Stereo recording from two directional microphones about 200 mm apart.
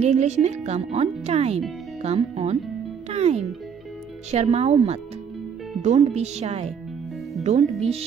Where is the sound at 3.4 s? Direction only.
Centre (ahead or behind).